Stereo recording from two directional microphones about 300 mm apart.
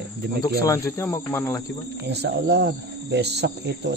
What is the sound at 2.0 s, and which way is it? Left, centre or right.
Speech, right.